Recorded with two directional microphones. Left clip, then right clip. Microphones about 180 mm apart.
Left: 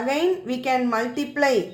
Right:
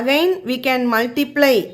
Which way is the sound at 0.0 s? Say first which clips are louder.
Right 6 dB; 35° right (ahead or behind).